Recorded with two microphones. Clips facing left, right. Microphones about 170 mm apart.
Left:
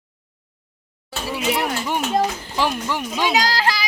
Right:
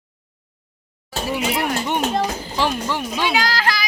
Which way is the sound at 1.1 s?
30° right (ahead or behind).